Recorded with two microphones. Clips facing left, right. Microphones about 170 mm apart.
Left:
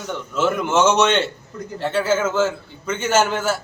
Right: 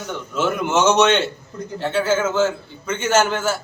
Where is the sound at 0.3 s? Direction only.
5° right (ahead or behind).